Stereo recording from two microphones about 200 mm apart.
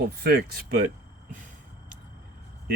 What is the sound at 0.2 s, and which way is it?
Speech, 50° right (ahead or behind).